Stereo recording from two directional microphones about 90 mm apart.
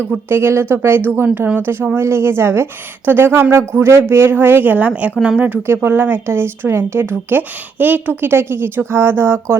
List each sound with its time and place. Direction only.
0.3 s speech: 25° right (ahead or behind)